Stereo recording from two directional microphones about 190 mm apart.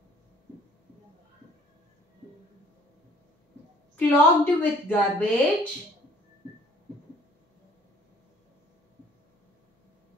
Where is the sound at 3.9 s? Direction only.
10° left (ahead or behind).